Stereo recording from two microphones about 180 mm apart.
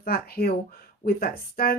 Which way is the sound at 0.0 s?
55° left (ahead or behind).